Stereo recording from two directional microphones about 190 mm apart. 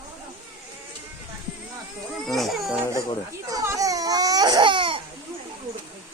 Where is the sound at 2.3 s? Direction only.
Centre (ahead or behind).